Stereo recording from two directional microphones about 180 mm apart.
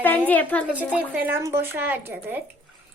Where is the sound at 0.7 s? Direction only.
10° right (ahead or behind).